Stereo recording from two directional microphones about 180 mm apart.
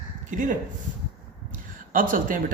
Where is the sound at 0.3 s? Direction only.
45° right (ahead or behind).